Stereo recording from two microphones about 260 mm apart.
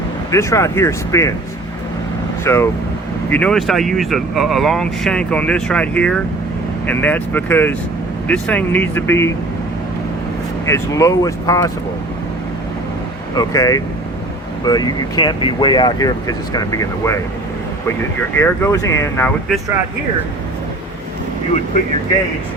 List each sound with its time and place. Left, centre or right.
0.3 s speech: centre
2.4 s speech: centre
10.7 s speech: centre
13.3 s speech: centre
18.3 s speech: centre